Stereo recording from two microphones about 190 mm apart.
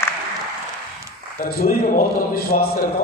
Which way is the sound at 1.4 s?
50° left (ahead or behind).